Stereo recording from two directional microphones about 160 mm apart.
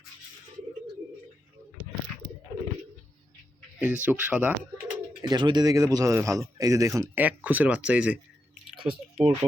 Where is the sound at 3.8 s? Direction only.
10° right (ahead or behind).